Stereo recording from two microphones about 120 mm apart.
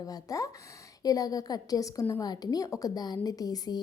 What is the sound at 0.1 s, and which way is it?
A woman's voice, 30° left (ahead or behind).